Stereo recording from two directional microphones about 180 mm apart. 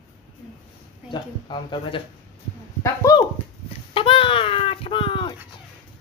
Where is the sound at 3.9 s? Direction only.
30° left (ahead or behind).